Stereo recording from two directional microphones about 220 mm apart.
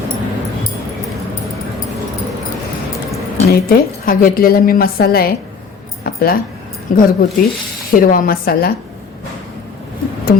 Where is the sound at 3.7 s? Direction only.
40° left (ahead or behind).